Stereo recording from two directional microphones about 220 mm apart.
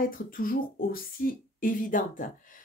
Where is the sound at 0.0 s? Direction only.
40° left (ahead or behind).